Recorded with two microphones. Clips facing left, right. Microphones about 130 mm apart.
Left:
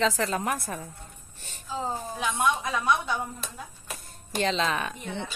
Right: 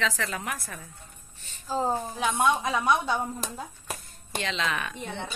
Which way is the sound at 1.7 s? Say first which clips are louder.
Right 5 dB; 40° right (ahead or behind).